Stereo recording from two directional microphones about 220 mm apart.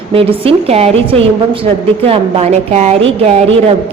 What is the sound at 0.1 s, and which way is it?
A man's voice, 25° right (ahead or behind).